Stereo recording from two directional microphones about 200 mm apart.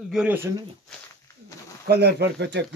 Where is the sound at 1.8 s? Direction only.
55° right (ahead or behind).